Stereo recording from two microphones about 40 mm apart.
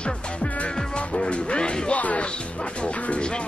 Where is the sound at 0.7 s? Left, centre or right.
Left.